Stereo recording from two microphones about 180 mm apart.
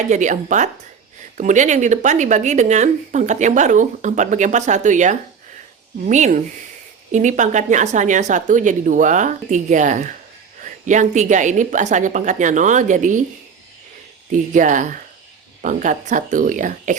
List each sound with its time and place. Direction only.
0.1 s a woman's voice: 45° right (ahead or behind)
14.3 s speech: 45° right (ahead or behind)